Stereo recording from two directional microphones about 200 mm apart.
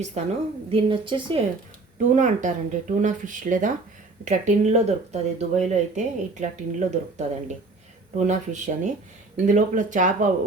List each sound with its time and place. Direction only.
0.2 s a woman's voice: 35° right (ahead or behind)
2.0 s speech: 35° right (ahead or behind)